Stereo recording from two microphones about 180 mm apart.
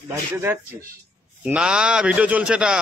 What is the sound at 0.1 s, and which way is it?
A man's voice, 15° right (ahead or behind).